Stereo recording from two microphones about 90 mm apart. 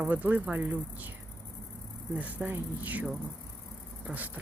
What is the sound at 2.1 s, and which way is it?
Speech, 15° right (ahead or behind).